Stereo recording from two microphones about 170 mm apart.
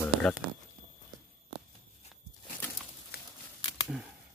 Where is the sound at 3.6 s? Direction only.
25° left (ahead or behind).